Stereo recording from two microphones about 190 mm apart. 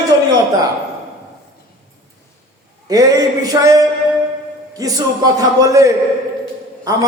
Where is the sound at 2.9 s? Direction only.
20° right (ahead or behind).